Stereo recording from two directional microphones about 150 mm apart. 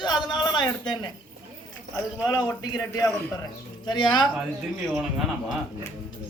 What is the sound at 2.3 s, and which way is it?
Speech, 25° left (ahead or behind).